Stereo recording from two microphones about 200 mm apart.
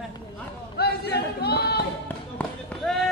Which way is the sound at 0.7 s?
55° left (ahead or behind).